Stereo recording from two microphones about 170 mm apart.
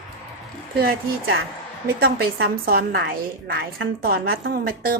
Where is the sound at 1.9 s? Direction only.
65° right (ahead or behind).